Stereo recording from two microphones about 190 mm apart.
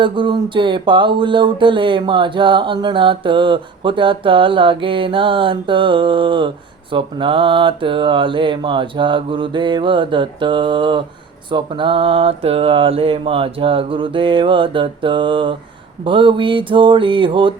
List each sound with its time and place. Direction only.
0.0 s speech: 25° right (ahead or behind)